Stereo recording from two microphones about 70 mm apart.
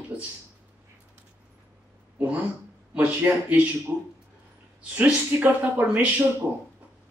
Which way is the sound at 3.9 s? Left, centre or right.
Right.